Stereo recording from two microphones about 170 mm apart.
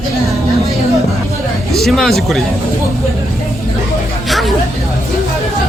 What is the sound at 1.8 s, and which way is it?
Speech, centre (ahead or behind).